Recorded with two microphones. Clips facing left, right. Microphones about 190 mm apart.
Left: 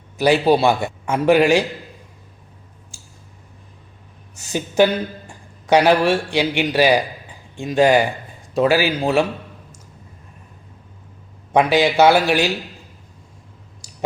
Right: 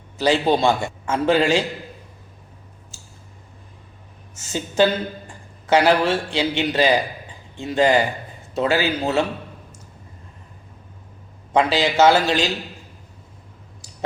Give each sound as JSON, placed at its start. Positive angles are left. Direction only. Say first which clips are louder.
{"t": 0.2, "sound": "a man's voice", "louder": "left 3 dB", "side_deg": 10}
{"t": 4.4, "sound": "a man's voice", "louder": "left 3 dB", "side_deg": 15}
{"t": 11.5, "sound": "a man's voice", "louder": "left 3 dB", "side_deg": 15}